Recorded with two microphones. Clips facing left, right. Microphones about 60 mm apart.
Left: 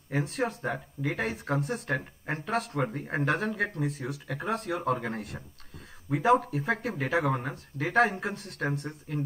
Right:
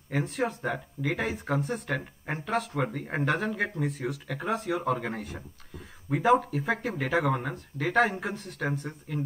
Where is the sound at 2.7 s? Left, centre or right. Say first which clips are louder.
Even; centre.